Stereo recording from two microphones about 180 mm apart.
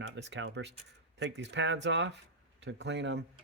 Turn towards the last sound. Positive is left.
turn(degrees=-80)